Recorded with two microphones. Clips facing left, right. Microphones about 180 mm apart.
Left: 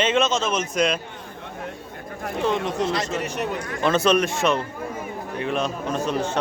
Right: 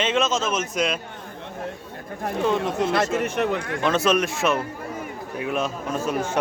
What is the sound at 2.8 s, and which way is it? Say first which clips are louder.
Speech: right 3 dB; 55° right (ahead or behind).